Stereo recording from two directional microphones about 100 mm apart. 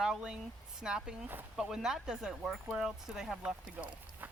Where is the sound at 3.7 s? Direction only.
20° right (ahead or behind).